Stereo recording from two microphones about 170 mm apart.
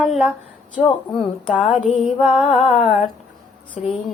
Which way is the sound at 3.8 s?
40° left (ahead or behind).